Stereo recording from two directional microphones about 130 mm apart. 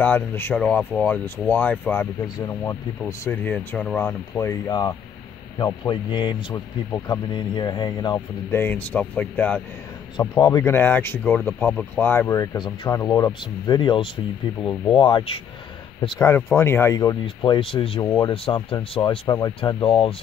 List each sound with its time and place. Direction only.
0.0 s speech: 15° left (ahead or behind)
4.4 s speech: 25° left (ahead or behind)
8.5 s speech: 15° left (ahead or behind)
10.1 s speech: 35° left (ahead or behind)
10.6 s speech: 20° left (ahead or behind)
12.5 s speech: 35° left (ahead or behind)
12.9 s speech: 25° left (ahead or behind); by 15.4 s 40° left (ahead or behind)
16.2 s speech: 20° left (ahead or behind)
17.6 s speech: 45° left (ahead or behind)
18.0 s speech: 30° left (ahead or behind)
18.3 s speech: 45° left (ahead or behind)
19.8 s speech: 45° left (ahead or behind)